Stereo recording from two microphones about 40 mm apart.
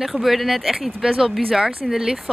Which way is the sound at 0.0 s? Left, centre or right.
Centre.